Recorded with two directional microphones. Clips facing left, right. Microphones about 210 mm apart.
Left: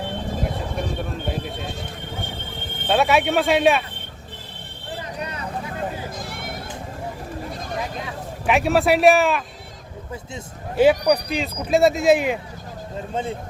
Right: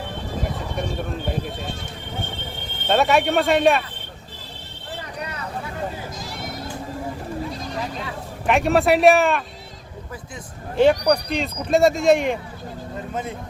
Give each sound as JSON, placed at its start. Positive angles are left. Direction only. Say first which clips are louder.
{"t": 2.8, "sound": "speech", "louder": "even", "side_deg": 0}
{"t": 6.1, "sound": "sheep", "louder": "even", "side_deg": 55}
{"t": 7.5, "sound": "a sound", "louder": "even", "side_deg": 50}
{"t": 8.4, "sound": "speech", "louder": "right 1 dB", "side_deg": 0}
{"t": 10.8, "sound": "speech", "louder": "even", "side_deg": 5}